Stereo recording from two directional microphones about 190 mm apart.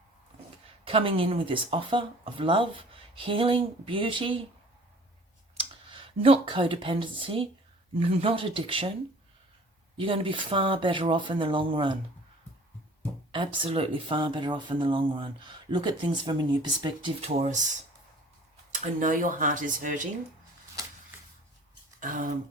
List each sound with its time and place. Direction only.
0.9 s speech: 30° right (ahead or behind)
5.5 s speech: 30° right (ahead or behind)
10.0 s speech: 30° right (ahead or behind)
13.3 s speech: 25° right (ahead or behind); by 20.1 s 45° right (ahead or behind)
22.0 s speech: 45° right (ahead or behind)